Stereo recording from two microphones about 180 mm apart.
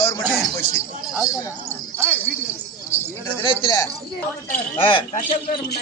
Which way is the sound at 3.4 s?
30° left (ahead or behind).